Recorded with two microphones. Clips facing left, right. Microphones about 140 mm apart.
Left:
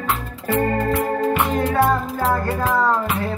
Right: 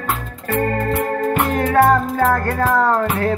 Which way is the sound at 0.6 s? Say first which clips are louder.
Right 1 dB; 10° left (ahead or behind).